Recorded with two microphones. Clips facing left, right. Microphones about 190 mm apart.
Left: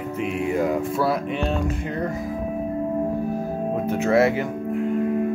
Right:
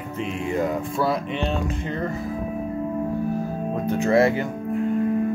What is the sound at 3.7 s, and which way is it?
Speech, 5° left (ahead or behind).